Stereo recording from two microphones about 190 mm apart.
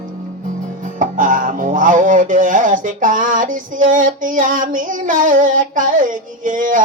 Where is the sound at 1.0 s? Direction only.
45° right (ahead or behind).